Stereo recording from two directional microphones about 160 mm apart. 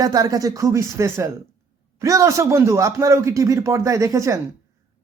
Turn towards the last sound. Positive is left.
turn(degrees=-20)  # may be behind; listen again after turning